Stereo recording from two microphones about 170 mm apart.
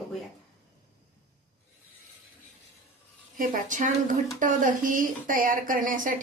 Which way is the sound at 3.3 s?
55° right (ahead or behind).